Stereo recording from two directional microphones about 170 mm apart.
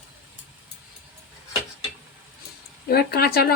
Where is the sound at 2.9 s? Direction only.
65° left (ahead or behind).